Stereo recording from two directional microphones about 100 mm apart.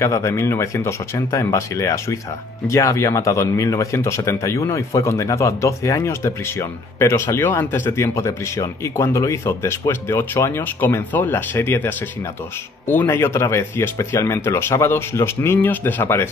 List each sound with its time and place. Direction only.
0.0 s speech: 30° left (ahead or behind)